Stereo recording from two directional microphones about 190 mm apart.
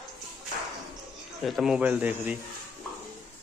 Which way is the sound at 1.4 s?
Centre (ahead or behind).